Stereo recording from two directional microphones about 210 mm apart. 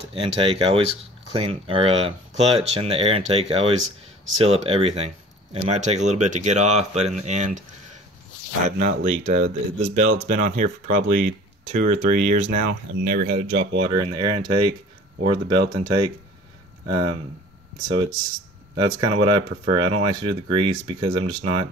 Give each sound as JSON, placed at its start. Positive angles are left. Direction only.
{"t": 0.4, "sound": "speech", "side_deg": -25}
{"t": 8.6, "sound": "speech", "side_deg": -35}
{"t": 12.6, "sound": "speech", "side_deg": -45}
{"t": 13.7, "sound": "speech", "side_deg": -25}